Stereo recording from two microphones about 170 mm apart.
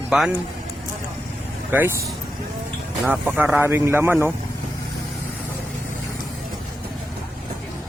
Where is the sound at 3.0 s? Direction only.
10° right (ahead or behind).